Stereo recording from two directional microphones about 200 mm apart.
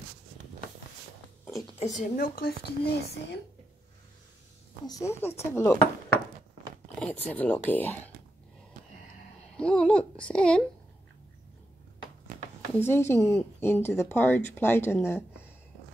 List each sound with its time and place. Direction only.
1.7 s speech: 35° left (ahead or behind); by 3.3 s 55° left (ahead or behind)
4.8 s speech: 15° left (ahead or behind)
7.0 s speech: 5° left (ahead or behind)
9.6 s a child's voice: 5° left (ahead or behind)
12.7 s speech: 10° left (ahead or behind)